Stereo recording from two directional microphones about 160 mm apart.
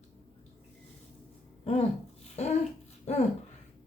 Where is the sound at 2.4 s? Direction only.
40° left (ahead or behind).